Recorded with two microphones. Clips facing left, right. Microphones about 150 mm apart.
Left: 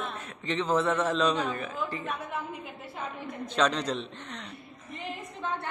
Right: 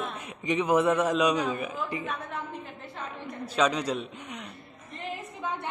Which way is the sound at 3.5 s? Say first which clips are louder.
Right 1 dB; 10° right (ahead or behind).